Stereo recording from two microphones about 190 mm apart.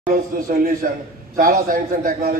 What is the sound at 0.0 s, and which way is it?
A man's voice, 50° right (ahead or behind).